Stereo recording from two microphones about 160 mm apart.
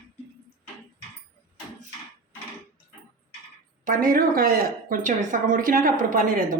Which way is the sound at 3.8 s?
60° right (ahead or behind).